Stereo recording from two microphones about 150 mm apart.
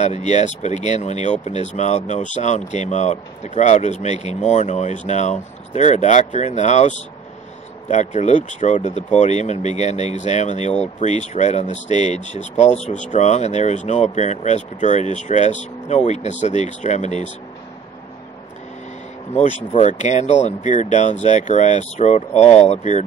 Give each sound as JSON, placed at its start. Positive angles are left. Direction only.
{"t": 0.0, "sound": "speech", "side_deg": 50}
{"t": 19.3, "sound": "speech", "side_deg": 50}